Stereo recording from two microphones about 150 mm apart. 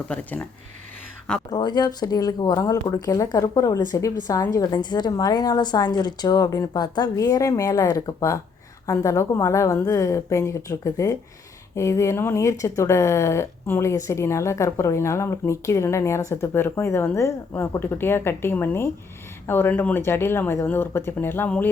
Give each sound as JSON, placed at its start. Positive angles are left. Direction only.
{"t": 0.1, "sound": "speech", "side_deg": 10}
{"t": 1.5, "sound": "a woman's voice", "side_deg": 30}